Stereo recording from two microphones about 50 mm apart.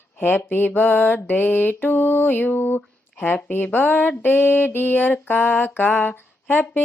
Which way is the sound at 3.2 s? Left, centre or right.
Left.